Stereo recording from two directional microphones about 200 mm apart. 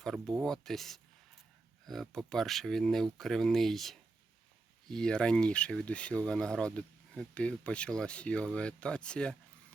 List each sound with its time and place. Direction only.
0.0 s speech: centre (ahead or behind)